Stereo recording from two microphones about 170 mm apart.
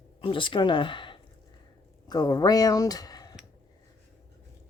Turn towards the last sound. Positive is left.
turn(degrees=25)  # may be behind; listen again after turning